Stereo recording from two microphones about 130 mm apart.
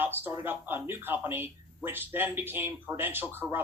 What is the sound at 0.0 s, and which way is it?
Speech, 15° right (ahead or behind).